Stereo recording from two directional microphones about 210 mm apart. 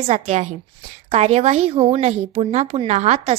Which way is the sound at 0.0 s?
30° right (ahead or behind).